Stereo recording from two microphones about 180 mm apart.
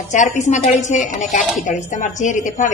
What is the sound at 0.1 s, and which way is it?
A woman's voice, 40° left (ahead or behind).